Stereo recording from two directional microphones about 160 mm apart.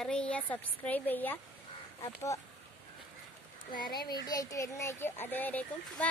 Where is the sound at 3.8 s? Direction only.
25° left (ahead or behind); by 6.1 s 10° left (ahead or behind).